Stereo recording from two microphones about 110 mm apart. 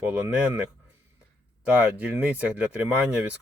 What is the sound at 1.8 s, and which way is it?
Speech, 15° right (ahead or behind).